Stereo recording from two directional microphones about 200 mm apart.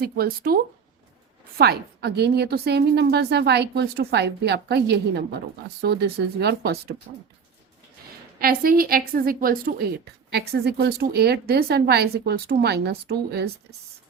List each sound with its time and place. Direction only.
0.0 s a woman's voice: 50° right (ahead or behind)
8.4 s a woman's voice: 45° right (ahead or behind)